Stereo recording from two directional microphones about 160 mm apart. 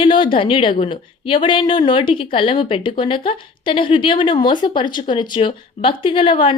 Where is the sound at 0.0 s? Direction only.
30° left (ahead or behind).